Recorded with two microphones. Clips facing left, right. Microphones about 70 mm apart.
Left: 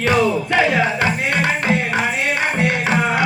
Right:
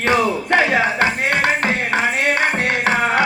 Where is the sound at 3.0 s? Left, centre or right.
Right.